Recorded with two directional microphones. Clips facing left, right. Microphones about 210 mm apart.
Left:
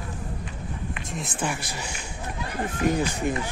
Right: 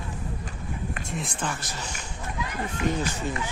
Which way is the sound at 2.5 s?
50° left (ahead or behind).